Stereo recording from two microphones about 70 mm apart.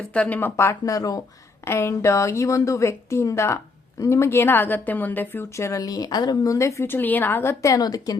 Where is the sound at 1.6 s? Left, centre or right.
Left.